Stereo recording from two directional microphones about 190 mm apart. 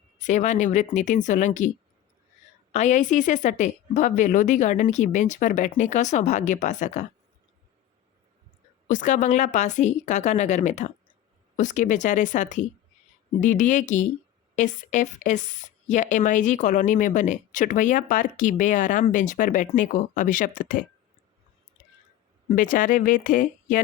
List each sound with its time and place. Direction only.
0.2 s speech: 40° left (ahead or behind)
2.7 s speech: 40° left (ahead or behind)
8.9 s speech: 40° left (ahead or behind)
22.4 s speech: 45° left (ahead or behind)